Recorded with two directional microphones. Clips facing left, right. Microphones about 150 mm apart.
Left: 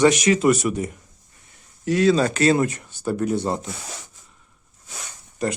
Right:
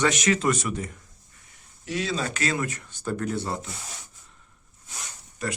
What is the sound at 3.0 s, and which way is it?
Speech, 15° left (ahead or behind).